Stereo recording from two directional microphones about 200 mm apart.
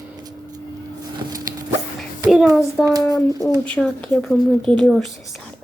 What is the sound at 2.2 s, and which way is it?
A child's voice, centre (ahead or behind).